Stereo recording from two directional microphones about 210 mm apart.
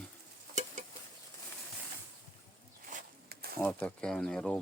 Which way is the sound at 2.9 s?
45° right (ahead or behind).